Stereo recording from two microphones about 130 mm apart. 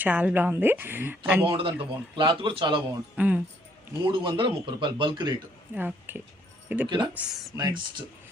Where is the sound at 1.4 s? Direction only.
40° right (ahead or behind).